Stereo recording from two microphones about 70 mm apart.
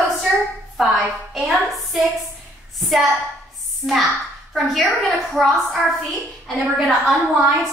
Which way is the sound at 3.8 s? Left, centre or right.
Centre.